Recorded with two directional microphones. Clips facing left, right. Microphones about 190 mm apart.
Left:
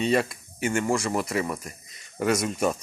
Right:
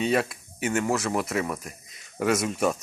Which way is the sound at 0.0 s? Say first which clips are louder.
Left 1 dB; 5° right (ahead or behind).